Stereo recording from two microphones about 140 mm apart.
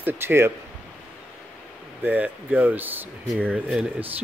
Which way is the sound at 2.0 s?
10° right (ahead or behind).